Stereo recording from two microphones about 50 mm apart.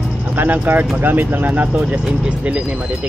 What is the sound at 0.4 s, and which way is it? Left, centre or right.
Speech, right.